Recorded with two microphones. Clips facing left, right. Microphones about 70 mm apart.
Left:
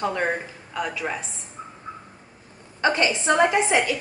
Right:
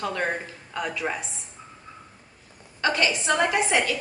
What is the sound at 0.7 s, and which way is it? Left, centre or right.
Speech, centre.